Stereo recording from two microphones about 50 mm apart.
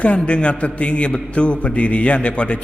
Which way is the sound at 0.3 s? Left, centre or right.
Left.